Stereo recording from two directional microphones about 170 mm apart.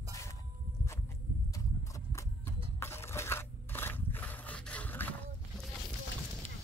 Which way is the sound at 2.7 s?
15° left (ahead or behind).